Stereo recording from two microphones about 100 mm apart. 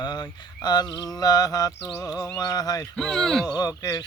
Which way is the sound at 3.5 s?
40° left (ahead or behind).